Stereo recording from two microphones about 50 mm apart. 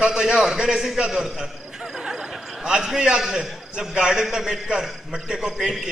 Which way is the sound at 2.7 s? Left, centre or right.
Centre.